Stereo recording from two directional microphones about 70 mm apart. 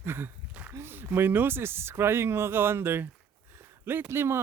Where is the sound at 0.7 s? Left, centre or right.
Right.